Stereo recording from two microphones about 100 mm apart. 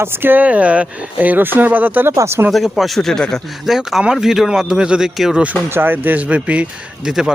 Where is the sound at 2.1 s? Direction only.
30° right (ahead or behind).